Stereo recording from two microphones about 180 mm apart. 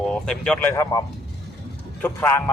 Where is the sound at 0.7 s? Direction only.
20° left (ahead or behind).